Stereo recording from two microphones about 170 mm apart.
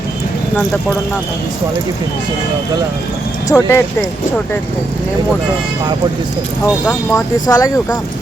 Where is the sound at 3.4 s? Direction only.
20° left (ahead or behind).